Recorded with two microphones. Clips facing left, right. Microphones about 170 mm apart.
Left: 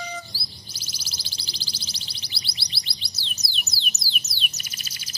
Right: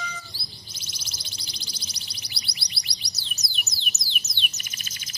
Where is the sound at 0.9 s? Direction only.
35° left (ahead or behind).